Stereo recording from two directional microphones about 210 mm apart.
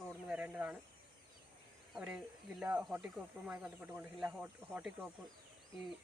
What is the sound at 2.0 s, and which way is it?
Speech, 5° right (ahead or behind).